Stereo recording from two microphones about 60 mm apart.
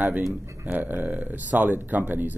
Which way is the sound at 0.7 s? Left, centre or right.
Right.